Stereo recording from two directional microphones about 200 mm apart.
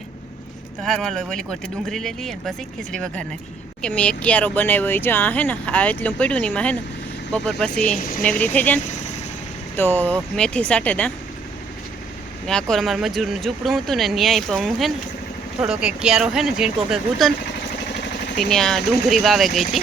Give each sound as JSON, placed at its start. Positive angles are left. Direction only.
{"t": 0.8, "sound": "speech", "side_deg": 5}
{"t": 7.9, "sound": "speech", "side_deg": 45}
{"t": 8.2, "sound": "speech", "side_deg": 5}
{"t": 12.5, "sound": "speech", "side_deg": 5}
{"t": 18.3, "sound": "speech", "side_deg": 0}